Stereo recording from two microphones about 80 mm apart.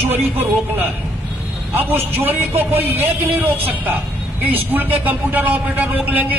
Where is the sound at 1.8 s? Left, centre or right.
Right.